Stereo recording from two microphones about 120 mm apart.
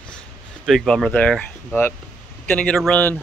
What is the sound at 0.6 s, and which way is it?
Speech, 5° left (ahead or behind).